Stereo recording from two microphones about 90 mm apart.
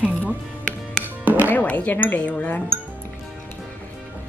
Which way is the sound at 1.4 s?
20° left (ahead or behind).